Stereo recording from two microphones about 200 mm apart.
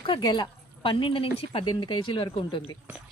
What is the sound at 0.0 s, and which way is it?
Speech, 20° left (ahead or behind).